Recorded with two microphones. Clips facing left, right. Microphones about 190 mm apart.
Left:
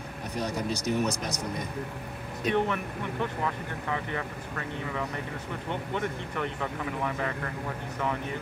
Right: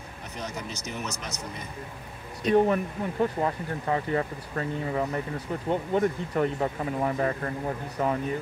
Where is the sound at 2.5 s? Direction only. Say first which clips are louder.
Right 6 dB; 35° right (ahead or behind).